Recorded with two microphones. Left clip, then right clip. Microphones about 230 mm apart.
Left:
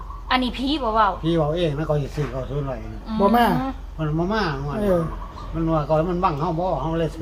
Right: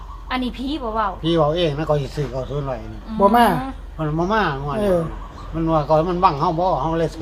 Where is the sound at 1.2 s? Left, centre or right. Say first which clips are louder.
Right 4 dB; right.